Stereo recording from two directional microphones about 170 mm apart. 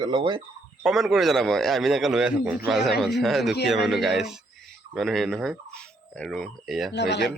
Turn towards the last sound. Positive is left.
turn(degrees=85)